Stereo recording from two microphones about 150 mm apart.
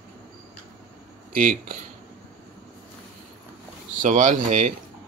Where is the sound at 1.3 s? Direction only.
65° right (ahead or behind).